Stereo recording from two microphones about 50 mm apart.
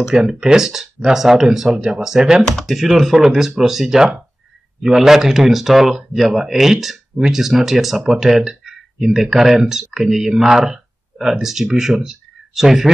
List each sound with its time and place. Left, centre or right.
0.1 s speech: centre